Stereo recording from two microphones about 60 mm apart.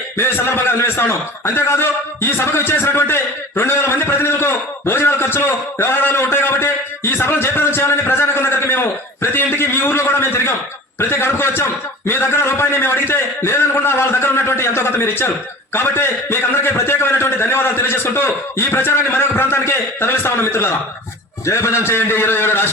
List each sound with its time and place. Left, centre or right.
0.2 s a man's voice: left